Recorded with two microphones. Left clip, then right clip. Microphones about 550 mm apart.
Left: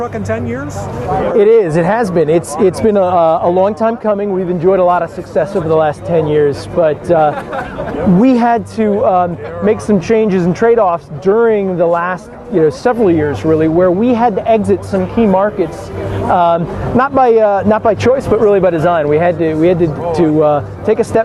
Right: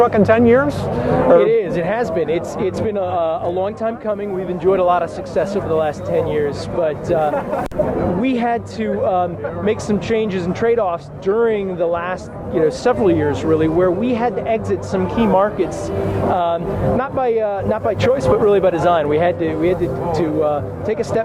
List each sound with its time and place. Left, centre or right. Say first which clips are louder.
0.0 s speech: right 7 dB; right
1.4 s speech: left 6 dB; left
4.6 s speech: left 4 dB; left
15.1 s speech: left 3 dB; left
16.3 s speech: left 10 dB; left